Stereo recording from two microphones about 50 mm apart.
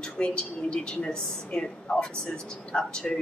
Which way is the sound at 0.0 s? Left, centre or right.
Centre.